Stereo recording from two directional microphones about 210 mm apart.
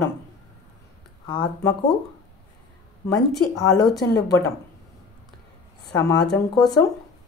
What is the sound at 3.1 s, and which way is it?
A woman's voice, 15° left (ahead or behind).